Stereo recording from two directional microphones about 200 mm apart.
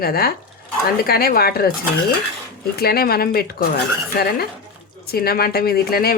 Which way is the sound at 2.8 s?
50° left (ahead or behind).